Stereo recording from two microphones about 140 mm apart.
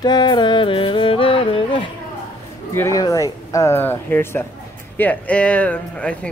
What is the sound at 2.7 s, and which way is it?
Speech, 15° left (ahead or behind).